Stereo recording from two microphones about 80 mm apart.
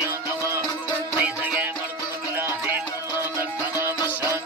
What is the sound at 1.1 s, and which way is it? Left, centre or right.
Music, centre.